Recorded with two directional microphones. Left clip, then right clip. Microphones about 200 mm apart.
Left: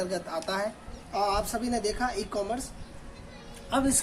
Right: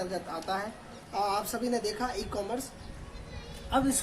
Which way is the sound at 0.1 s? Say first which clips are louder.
Left 2 dB; 25° left (ahead or behind).